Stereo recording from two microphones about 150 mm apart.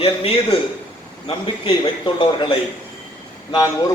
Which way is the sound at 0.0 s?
40° left (ahead or behind).